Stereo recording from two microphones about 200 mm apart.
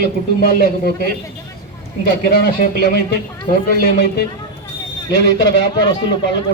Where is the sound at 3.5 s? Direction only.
50° left (ahead or behind).